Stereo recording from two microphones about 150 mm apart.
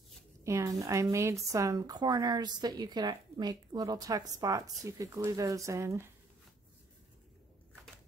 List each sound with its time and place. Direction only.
0.4 s speech: 20° right (ahead or behind)